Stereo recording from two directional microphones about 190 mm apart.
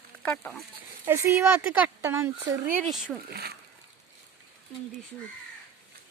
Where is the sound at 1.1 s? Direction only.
15° right (ahead or behind).